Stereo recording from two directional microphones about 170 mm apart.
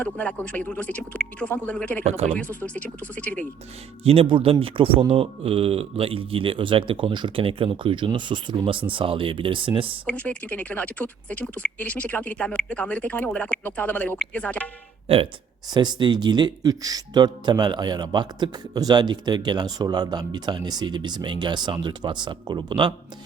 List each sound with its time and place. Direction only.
0.0 s speech: 10° left (ahead or behind)
2.0 s a man's voice: 40° right (ahead or behind)
2.3 s speech: 10° left (ahead or behind)
4.0 s a man's voice: 35° right (ahead or behind)
10.1 s speech: 10° left (ahead or behind)
15.0 s speech: 35° right (ahead or behind)